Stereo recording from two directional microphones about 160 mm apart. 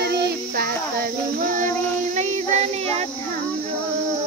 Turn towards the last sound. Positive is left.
turn(degrees=-40)  # may be behind; listen again after turning